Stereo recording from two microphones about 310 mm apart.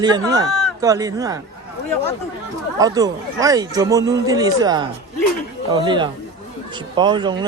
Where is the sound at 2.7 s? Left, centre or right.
Centre.